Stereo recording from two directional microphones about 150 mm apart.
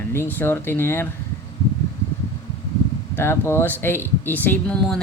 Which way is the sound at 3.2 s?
15° left (ahead or behind).